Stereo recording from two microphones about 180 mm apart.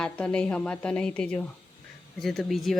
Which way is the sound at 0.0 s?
5° left (ahead or behind).